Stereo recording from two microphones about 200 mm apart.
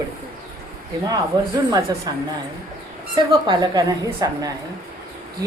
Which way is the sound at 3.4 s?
20° right (ahead or behind).